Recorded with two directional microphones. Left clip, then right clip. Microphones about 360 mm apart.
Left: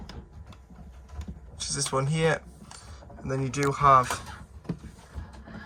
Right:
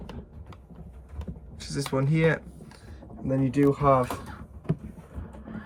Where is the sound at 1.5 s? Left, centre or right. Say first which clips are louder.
Left 1 dB; centre.